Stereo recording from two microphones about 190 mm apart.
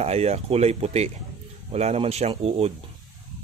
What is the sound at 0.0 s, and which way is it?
Speech, 35° right (ahead or behind).